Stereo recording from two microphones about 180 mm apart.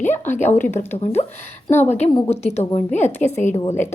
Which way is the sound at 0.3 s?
40° left (ahead or behind).